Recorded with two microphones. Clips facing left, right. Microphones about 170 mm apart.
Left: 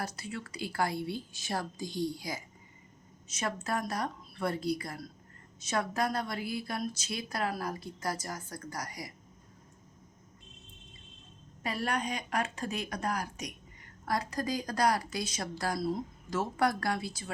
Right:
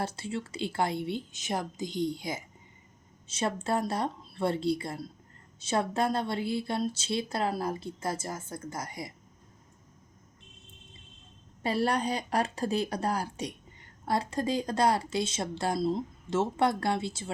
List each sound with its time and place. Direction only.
0.0 s a woman's voice: 25° right (ahead or behind)
11.6 s a woman's voice: 30° right (ahead or behind)